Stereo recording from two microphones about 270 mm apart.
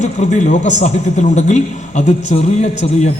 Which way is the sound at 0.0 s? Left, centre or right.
Left.